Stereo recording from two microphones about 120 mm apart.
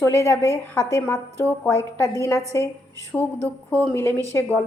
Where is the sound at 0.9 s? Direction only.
20° left (ahead or behind).